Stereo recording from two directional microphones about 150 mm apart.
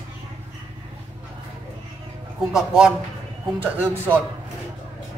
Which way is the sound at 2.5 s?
5° right (ahead or behind).